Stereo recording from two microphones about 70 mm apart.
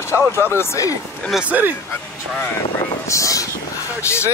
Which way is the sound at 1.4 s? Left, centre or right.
Right.